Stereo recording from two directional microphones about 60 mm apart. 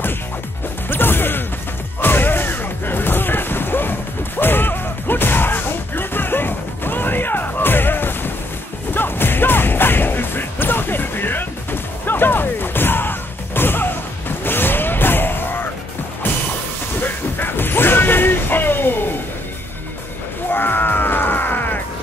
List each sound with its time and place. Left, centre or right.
0.8 s music: left
2.0 s a sound: left
8.9 s music: left
17.0 s music: left
20.5 s music: left